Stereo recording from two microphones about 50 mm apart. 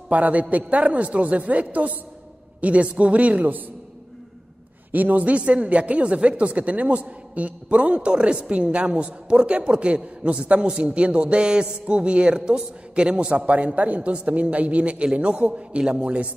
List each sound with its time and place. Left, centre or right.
0.1 s a man's voice: right
4.9 s speech: right
13.4 s speech: right